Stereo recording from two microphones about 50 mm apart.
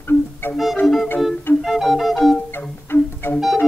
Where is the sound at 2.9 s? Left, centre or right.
Left.